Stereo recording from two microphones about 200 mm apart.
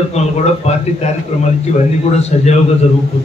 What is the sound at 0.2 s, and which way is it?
A man's voice, 35° left (ahead or behind).